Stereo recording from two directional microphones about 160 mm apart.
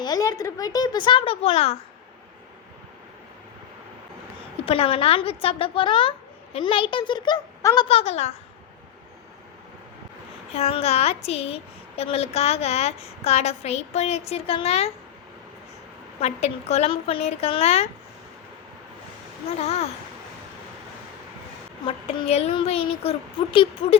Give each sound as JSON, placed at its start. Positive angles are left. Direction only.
{"t": 0.0, "sound": "speech", "side_deg": 20}
{"t": 4.6, "sound": "a woman's voice", "side_deg": 35}
{"t": 7.9, "sound": "a woman's voice", "side_deg": 40}
{"t": 10.5, "sound": "a woman's voice", "side_deg": 40}
{"t": 16.2, "sound": "a woman's voice", "side_deg": 40}
{"t": 19.5, "sound": "a woman's voice", "side_deg": 40}
{"t": 21.8, "sound": "a woman's voice", "side_deg": 40}